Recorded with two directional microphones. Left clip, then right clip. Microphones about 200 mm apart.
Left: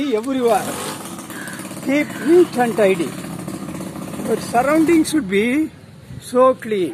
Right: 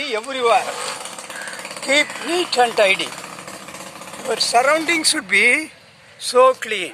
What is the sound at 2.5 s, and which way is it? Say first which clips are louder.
Speech: right 3 dB; 35° right (ahead or behind).